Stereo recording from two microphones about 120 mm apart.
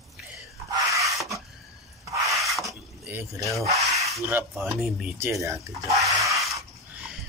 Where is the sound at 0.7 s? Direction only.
30° right (ahead or behind).